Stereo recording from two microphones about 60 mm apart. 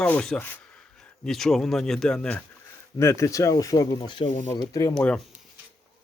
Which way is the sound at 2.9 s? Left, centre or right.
Left.